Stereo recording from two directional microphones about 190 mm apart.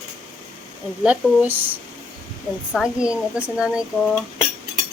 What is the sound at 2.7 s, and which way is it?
Speech, 5° right (ahead or behind).